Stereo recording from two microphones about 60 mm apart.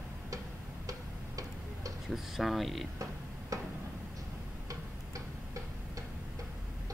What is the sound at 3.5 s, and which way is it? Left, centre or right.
Tick-tock, right.